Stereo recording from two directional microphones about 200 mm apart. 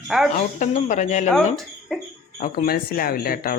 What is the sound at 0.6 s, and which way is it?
Speech, 40° left (ahead or behind).